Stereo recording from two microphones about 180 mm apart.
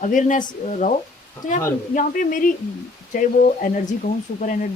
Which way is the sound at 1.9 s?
50° left (ahead or behind).